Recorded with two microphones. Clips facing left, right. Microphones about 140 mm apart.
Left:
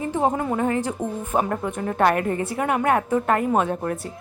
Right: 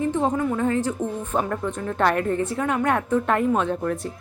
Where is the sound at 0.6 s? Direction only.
15° left (ahead or behind).